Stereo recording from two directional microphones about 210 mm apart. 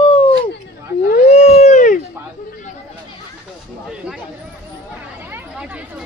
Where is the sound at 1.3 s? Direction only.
30° left (ahead or behind).